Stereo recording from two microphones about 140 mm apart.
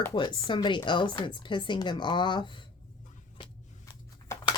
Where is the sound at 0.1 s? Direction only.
35° left (ahead or behind).